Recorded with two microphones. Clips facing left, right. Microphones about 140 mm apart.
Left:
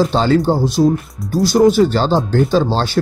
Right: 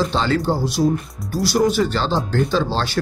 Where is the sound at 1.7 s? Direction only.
40° left (ahead or behind).